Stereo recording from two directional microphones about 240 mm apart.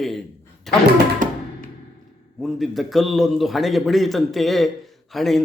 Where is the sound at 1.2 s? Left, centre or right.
Right.